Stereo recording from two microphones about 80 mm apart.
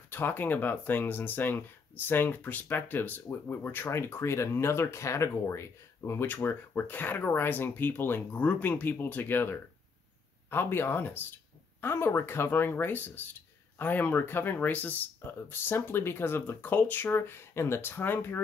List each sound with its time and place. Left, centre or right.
0.1 s speech: left